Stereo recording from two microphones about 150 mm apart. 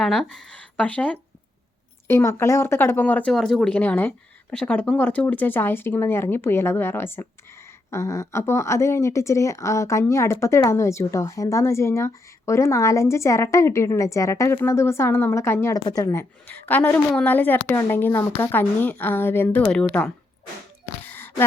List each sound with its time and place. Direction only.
0.0 s a woman's voice: 5° left (ahead or behind)
3.3 s a woman's voice: centre (ahead or behind)
20.8 s a sound: 15° left (ahead or behind)